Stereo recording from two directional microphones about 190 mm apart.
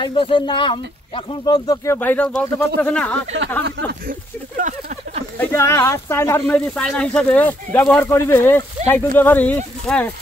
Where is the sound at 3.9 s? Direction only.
50° right (ahead or behind).